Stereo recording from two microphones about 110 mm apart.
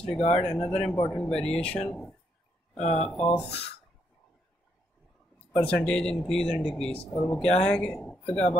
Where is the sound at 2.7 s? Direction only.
80° left.